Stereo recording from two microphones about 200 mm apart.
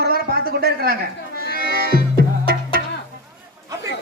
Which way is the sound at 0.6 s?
50° right (ahead or behind).